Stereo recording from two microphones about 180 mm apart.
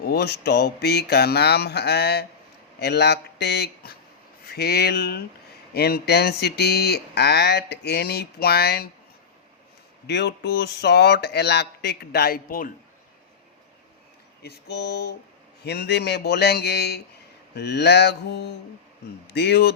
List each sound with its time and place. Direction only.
0.0 s speech: 60° left (ahead or behind)
10.1 s speech: 75° left (ahead or behind); by 12.7 s 50° left (ahead or behind)
14.4 s speech: 65° left (ahead or behind)